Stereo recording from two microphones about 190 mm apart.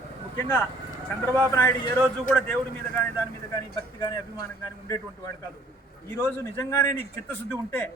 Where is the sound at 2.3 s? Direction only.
10° left (ahead or behind).